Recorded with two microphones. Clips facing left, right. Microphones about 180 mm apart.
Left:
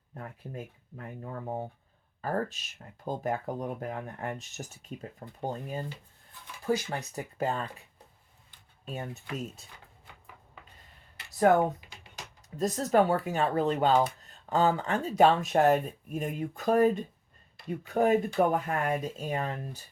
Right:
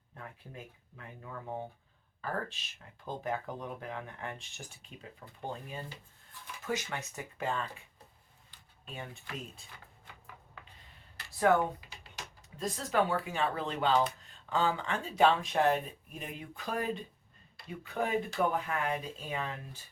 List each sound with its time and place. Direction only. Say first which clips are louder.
0.1 s speech: left 6 dB; 40° left (ahead or behind)
8.8 s speech: left 7 dB; 40° left (ahead or behind)
12.5 s speech: left 6 dB; 45° left (ahead or behind)